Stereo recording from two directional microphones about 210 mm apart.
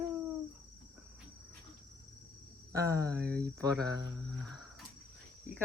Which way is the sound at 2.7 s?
15° right (ahead or behind).